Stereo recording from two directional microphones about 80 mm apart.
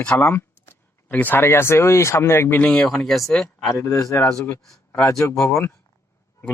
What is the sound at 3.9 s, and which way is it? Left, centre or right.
Speech, left.